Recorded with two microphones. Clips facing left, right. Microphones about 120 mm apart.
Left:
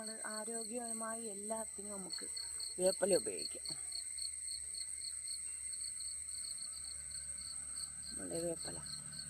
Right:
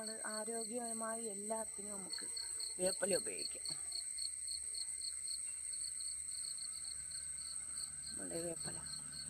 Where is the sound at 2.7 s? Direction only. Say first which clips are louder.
Left 5 dB; 20° left (ahead or behind).